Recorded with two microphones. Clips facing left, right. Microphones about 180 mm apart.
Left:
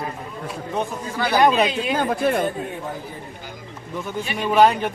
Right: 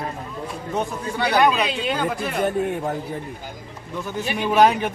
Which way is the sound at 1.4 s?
40° left (ahead or behind).